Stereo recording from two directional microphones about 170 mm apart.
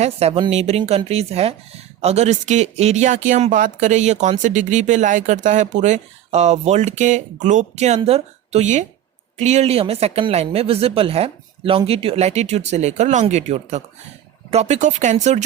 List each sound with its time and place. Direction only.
0.0 s speech: 35° right (ahead or behind)